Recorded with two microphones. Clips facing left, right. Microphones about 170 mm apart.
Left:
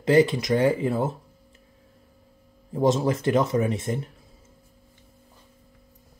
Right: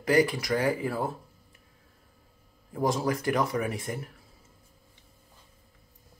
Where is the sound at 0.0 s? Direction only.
25° left (ahead or behind).